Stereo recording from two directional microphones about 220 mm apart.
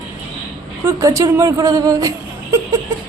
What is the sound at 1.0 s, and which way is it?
A woman's voice, 15° right (ahead or behind).